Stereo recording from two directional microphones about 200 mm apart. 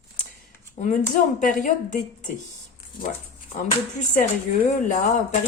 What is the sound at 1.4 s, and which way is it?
Speech, 40° left (ahead or behind).